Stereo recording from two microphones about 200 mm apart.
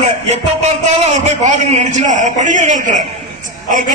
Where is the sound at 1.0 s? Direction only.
35° right (ahead or behind).